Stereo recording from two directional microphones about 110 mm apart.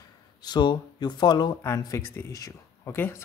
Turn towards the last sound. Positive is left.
turn(degrees=25)  # may be behind; listen again after turning